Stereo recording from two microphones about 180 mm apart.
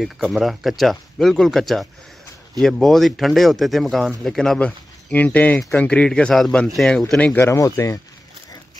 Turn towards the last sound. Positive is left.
turn(degrees=15)  # may be behind; listen again after turning